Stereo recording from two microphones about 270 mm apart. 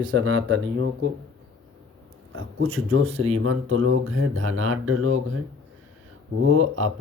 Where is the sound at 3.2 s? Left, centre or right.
Right.